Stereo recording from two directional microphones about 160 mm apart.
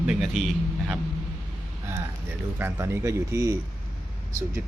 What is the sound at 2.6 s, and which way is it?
Speech, 15° right (ahead or behind).